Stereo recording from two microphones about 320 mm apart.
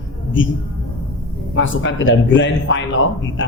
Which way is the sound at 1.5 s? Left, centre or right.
Left.